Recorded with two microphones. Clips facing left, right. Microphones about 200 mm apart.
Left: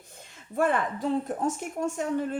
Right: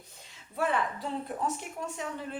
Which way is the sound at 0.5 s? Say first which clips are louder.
Left 4 dB; 50° left (ahead or behind).